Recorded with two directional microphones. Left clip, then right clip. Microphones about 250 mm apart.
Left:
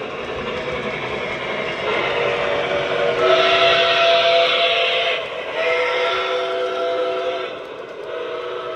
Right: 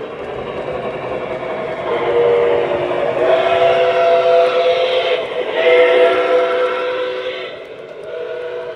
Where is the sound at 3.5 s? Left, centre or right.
Right.